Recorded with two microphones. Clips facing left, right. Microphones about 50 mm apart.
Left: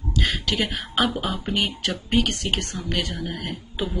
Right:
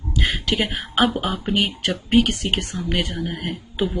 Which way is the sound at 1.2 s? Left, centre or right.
Centre.